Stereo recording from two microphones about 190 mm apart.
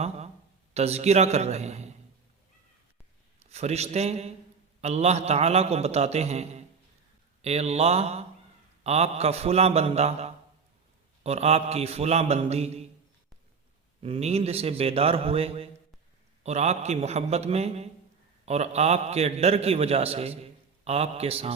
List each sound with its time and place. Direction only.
0.7 s a man's voice: 35° right (ahead or behind)
3.5 s a man's voice: 35° right (ahead or behind)
14.0 s a man's voice: 30° right (ahead or behind)